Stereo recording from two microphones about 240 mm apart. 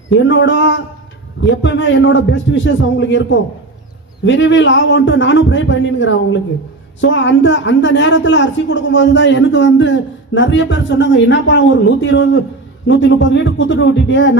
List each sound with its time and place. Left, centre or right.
0.1 s speech: left